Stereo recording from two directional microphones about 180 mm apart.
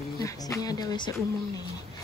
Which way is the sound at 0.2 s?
20° left (ahead or behind).